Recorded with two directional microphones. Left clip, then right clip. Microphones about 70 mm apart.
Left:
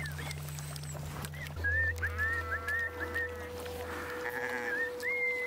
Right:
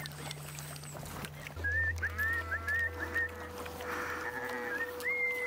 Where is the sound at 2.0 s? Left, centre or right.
Centre.